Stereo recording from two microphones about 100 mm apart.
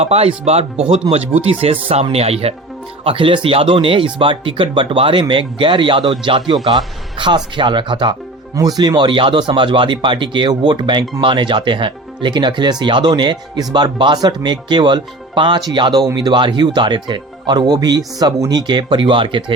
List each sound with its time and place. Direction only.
0.0 s speech: 85° right
1.1 s speech: 35° right (ahead or behind)
1.5 s speech: 75° right (ahead or behind)
2.1 s speech: 90° right
3.0 s speech: 65° right (ahead or behind)
8.5 s speech: 40° right (ahead or behind); by 19.5 s 55° right (ahead or behind)